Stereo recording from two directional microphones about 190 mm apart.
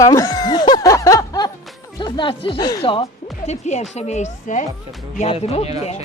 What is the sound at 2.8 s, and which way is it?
A woman's voice, 30° left (ahead or behind).